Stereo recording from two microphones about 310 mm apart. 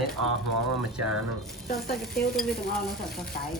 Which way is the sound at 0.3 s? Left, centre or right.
Right.